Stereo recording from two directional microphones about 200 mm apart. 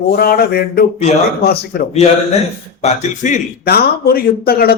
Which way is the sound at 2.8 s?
35° left (ahead or behind).